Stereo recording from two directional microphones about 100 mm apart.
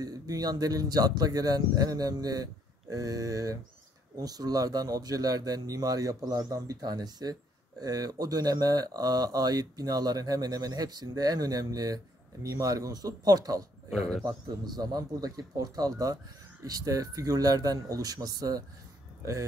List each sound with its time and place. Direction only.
0.0 s speech: 40° right (ahead or behind)
13.8 s speech: 5° left (ahead or behind)
14.2 s speech: 45° right (ahead or behind)